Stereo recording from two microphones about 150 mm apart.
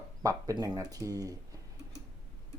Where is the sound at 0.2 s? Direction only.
20° right (ahead or behind).